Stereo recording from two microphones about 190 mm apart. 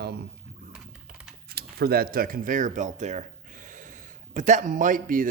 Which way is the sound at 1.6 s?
55° right (ahead or behind).